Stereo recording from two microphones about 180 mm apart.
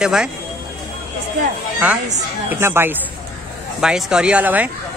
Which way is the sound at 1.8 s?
10° right (ahead or behind).